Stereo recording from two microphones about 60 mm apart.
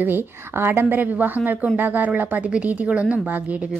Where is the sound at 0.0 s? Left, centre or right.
Right.